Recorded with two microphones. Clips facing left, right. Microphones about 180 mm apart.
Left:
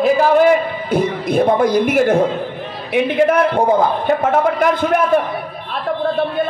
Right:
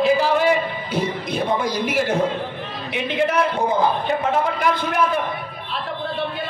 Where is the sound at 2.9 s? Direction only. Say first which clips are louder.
Left 7 dB; 55° left (ahead or behind).